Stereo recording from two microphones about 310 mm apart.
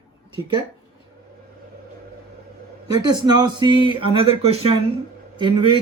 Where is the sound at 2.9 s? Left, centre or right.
Centre.